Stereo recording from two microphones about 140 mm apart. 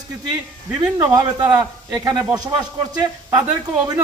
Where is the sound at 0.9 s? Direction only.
25° right (ahead or behind).